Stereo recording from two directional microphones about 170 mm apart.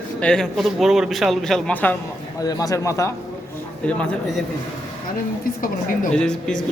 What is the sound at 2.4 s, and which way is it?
Speech, 20° left (ahead or behind).